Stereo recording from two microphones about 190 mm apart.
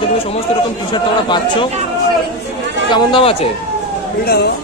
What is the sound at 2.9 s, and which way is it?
Speech, 25° left (ahead or behind).